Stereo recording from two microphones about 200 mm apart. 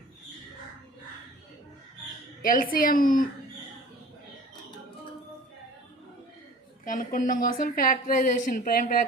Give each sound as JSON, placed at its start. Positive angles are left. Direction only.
{"t": 2.4, "sound": "a woman's voice", "side_deg": 45}
{"t": 6.8, "sound": "a woman's voice", "side_deg": 45}